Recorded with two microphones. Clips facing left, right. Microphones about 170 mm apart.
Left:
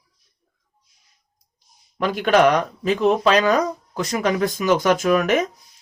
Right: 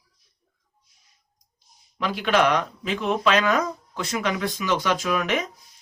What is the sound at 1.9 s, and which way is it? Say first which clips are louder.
Speech: left 5 dB; 50° left (ahead or behind).